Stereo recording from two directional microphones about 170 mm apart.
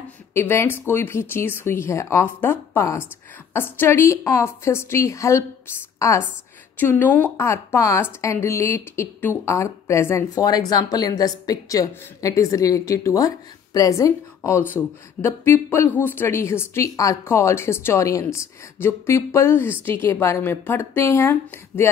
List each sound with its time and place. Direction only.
0.3 s a woman's voice: 15° left (ahead or behind)